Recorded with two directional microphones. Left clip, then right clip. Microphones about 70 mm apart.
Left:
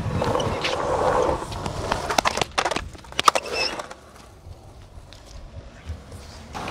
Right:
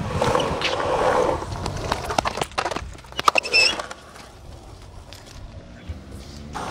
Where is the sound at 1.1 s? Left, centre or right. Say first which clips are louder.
Right 1 dB; centre.